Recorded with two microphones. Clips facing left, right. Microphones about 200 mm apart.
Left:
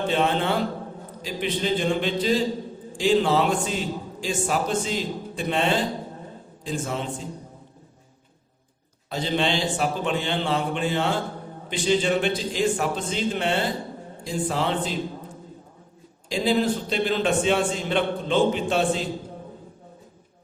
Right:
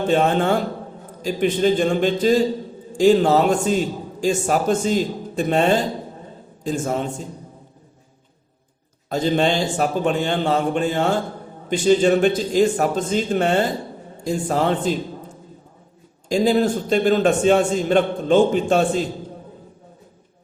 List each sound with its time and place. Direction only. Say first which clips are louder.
0.1 s a man's voice: right 6 dB; 45° right (ahead or behind)
9.0 s a man's voice: right 6 dB; 45° right (ahead or behind)
16.3 s a man's voice: right 5 dB; 45° right (ahead or behind)